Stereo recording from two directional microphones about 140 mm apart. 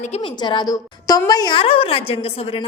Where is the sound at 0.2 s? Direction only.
35° left (ahead or behind).